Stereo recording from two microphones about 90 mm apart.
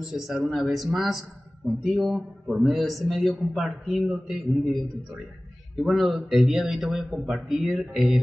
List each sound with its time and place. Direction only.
0.0 s a man's voice: 5° right (ahead or behind)
5.8 s a man's voice: centre (ahead or behind)